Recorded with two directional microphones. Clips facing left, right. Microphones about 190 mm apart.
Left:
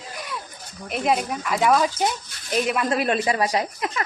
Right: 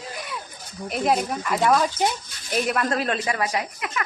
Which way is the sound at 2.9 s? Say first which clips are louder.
Left 3 dB; 15° left (ahead or behind).